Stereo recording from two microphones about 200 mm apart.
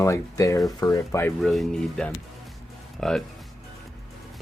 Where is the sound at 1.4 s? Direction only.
Centre (ahead or behind).